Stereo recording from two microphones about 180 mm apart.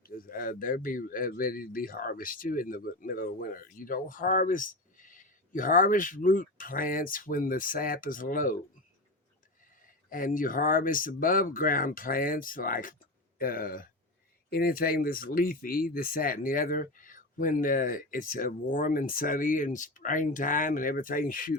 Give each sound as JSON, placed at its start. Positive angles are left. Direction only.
{"t": 0.0, "sound": "speech", "side_deg": 50}
{"t": 10.1, "sound": "speech", "side_deg": 50}